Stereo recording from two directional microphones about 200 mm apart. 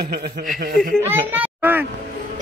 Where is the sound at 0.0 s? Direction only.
50° right (ahead or behind).